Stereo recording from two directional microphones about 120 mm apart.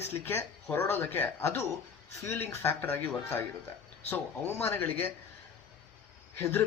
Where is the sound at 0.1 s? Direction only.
20° left (ahead or behind).